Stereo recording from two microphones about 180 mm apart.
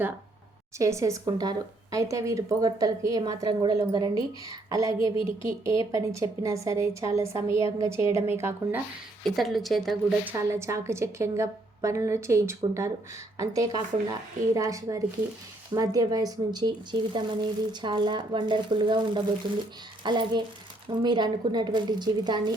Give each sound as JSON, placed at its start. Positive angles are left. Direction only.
{"t": 0.8, "sound": "a woman's voice", "side_deg": -15}
{"t": 9.2, "sound": "speech", "side_deg": 0}
{"t": 10.2, "sound": "a woman's voice", "side_deg": -15}